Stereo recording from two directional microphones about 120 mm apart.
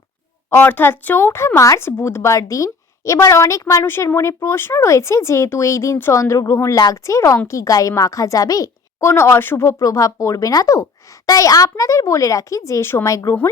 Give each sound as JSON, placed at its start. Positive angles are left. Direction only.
{"t": 0.5, "sound": "a woman's voice", "side_deg": 15}